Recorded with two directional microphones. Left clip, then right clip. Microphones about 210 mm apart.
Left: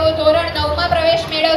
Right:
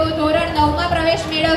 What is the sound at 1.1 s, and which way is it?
Music, 55° right (ahead or behind).